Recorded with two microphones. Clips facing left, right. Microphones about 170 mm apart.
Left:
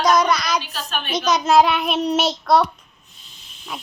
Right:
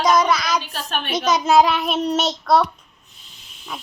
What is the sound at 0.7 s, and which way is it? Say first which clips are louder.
Speech: right 1 dB; 55° right (ahead or behind).